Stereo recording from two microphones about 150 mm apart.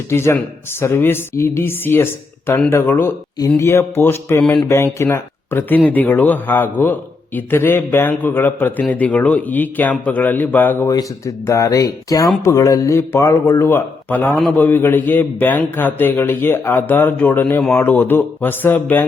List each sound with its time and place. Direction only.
0.1 s a man's voice: 20° left (ahead or behind)